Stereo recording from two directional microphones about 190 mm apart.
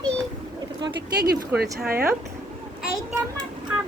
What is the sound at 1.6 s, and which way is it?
Speech, 55° right (ahead or behind).